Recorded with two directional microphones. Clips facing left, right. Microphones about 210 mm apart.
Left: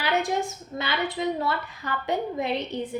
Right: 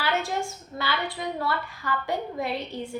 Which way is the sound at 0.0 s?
15° left (ahead or behind).